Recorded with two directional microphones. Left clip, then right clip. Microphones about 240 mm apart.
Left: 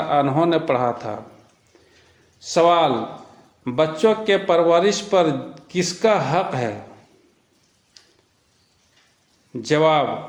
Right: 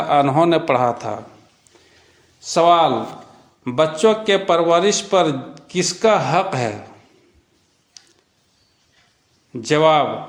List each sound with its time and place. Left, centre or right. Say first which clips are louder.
0.1 s a man's voice: right 4 dB; right
2.4 s a man's voice: right 2 dB; centre
8.0 s a sound: right 4 dB; centre
9.5 s a man's voice: right 3 dB; centre